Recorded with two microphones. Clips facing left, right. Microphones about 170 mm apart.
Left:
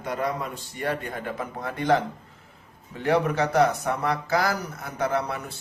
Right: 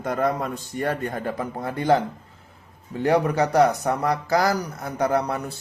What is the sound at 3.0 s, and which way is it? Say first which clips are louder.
Speech: right 3 dB; 40° right (ahead or behind).